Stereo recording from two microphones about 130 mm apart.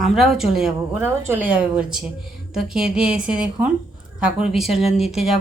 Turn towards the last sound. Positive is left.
turn(degrees=0)  # may be behind; listen again after turning